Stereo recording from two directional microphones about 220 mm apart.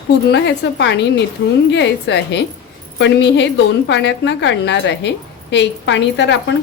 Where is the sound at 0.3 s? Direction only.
55° left (ahead or behind).